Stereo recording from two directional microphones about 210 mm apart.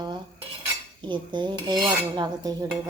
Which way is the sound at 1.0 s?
20° right (ahead or behind).